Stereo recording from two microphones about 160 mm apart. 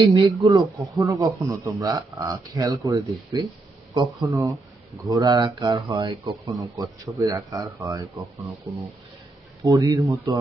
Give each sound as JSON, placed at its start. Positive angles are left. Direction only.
{"t": 0.0, "sound": "speech", "side_deg": -35}
{"t": 0.5, "sound": "speech", "side_deg": -20}
{"t": 9.6, "sound": "speech", "side_deg": -20}